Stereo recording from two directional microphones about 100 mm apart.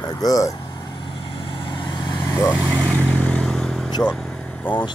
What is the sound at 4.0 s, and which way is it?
Speech, 15° left (ahead or behind).